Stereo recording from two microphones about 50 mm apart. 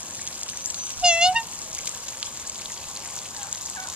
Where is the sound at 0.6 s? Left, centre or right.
Centre.